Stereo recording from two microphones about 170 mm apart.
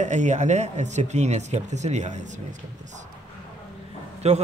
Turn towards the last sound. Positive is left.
turn(degrees=-40)  # may be behind; listen again after turning